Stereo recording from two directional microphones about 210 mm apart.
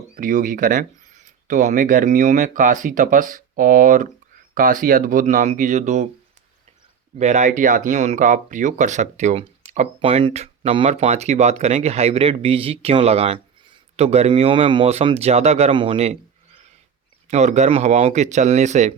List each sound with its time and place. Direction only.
0.2 s speech: 40° right (ahead or behind)
7.2 s speech: 35° right (ahead or behind)
17.2 s speech: 35° right (ahead or behind)